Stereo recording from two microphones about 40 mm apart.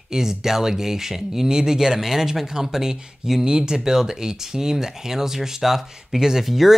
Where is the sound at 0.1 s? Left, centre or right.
Centre.